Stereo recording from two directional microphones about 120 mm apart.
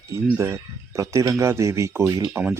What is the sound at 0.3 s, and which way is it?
Speech, 25° right (ahead or behind).